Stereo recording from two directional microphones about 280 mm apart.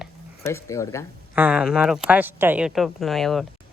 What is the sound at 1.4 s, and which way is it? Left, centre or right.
A woman's voice, centre.